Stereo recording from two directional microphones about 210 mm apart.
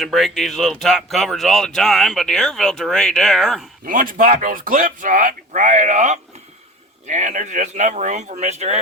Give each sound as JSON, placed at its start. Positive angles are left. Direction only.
{"t": 0.0, "sound": "speech", "side_deg": 0}
{"t": 3.8, "sound": "speech", "side_deg": -40}